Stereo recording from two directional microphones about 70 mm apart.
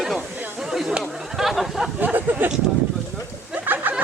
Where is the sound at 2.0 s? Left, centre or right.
Right.